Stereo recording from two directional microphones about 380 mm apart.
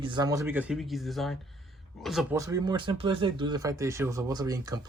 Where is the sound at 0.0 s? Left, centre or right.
Centre.